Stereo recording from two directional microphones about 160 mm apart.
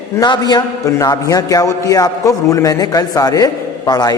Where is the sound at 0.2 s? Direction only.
25° left (ahead or behind).